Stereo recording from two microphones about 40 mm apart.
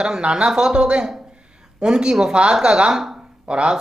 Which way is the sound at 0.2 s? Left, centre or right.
Right.